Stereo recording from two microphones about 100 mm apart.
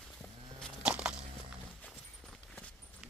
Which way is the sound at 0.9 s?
10° right (ahead or behind).